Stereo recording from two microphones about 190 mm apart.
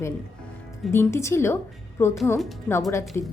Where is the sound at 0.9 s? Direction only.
15° left (ahead or behind).